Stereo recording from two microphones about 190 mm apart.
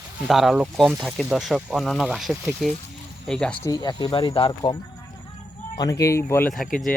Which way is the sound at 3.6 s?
20° left (ahead or behind).